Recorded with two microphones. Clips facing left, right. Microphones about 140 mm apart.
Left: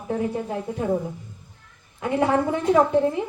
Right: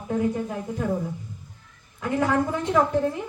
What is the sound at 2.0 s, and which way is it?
A woman's voice, 25° left (ahead or behind).